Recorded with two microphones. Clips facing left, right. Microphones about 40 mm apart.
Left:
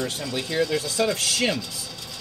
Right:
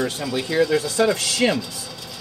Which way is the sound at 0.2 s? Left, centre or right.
Centre.